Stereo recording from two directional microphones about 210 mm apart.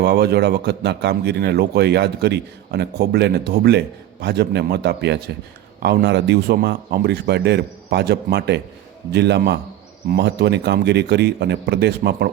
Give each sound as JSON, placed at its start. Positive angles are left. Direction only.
{"t": 0.0, "sound": "a man's voice", "side_deg": -50}